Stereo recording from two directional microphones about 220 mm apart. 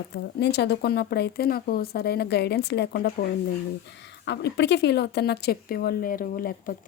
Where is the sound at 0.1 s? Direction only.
50° left (ahead or behind).